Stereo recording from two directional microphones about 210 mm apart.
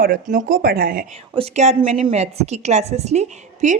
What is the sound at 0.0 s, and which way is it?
Speech, 40° right (ahead or behind).